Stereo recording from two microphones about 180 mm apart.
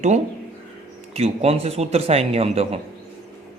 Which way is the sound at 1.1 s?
35° right (ahead or behind).